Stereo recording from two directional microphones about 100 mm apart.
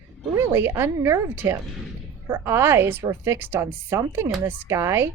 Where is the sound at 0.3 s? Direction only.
25° right (ahead or behind).